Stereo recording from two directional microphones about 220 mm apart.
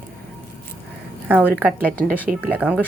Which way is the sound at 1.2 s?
10° right (ahead or behind).